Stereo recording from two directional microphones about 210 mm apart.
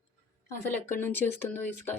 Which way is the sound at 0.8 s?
10° left (ahead or behind).